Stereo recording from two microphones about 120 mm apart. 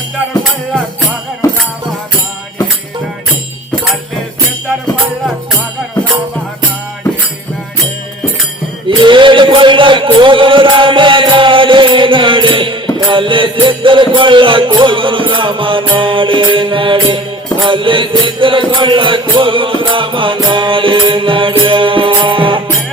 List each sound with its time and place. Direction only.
8.9 s music: 45° right (ahead or behind)